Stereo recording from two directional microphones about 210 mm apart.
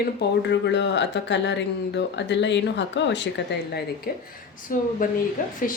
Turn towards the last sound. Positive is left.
turn(degrees=40)  # may be behind; listen again after turning